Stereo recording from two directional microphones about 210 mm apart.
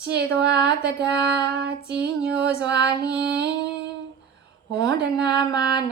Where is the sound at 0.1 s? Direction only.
50° right (ahead or behind).